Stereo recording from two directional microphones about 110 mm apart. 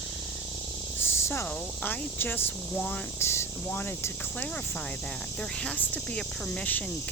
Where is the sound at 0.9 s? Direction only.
20° left (ahead or behind).